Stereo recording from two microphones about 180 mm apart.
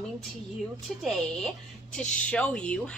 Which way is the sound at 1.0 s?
5° left (ahead or behind).